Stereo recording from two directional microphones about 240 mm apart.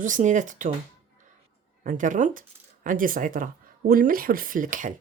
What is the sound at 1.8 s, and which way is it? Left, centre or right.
Speech, right.